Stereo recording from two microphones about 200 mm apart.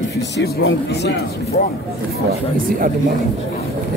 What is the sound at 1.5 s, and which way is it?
Speech, 45° left (ahead or behind).